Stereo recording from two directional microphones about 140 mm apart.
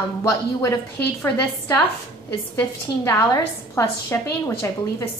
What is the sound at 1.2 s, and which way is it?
A woman's voice, 15° left (ahead or behind).